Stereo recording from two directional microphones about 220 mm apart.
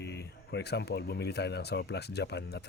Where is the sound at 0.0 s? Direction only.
50° left (ahead or behind).